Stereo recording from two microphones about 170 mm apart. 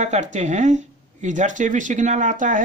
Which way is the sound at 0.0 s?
45° right (ahead or behind).